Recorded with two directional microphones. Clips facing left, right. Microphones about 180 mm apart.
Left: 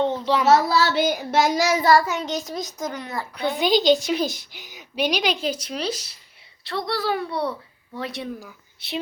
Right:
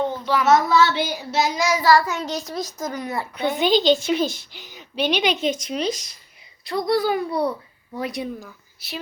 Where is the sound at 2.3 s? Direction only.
20° left (ahead or behind).